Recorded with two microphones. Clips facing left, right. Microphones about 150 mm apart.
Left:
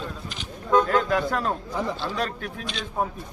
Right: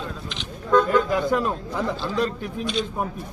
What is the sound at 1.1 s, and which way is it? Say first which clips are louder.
Speech: right 2 dB; 20° right (ahead or behind).